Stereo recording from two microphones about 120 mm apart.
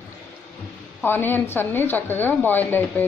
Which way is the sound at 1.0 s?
15° left (ahead or behind).